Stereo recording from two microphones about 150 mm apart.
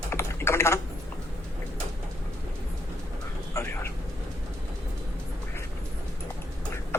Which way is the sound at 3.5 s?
15° left (ahead or behind).